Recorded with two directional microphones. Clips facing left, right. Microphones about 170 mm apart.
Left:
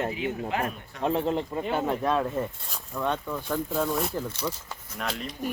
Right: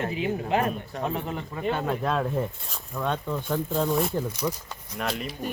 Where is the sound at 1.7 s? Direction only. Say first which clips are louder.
Even; 10° left (ahead or behind).